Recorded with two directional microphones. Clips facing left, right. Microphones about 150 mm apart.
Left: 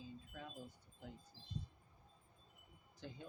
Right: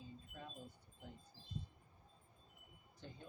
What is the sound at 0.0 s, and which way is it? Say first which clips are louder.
Wind chime: left 2 dB; centre (ahead or behind).